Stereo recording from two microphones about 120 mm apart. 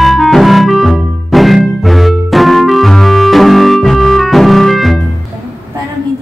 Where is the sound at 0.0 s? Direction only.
Centre (ahead or behind).